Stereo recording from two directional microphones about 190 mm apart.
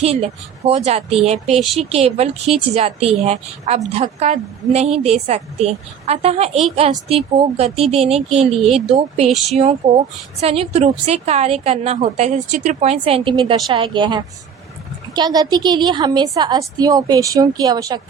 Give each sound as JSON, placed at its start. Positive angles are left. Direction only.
{"t": 0.0, "sound": "a woman's voice", "side_deg": -30}